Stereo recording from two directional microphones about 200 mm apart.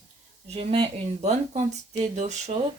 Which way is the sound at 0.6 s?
25° right (ahead or behind).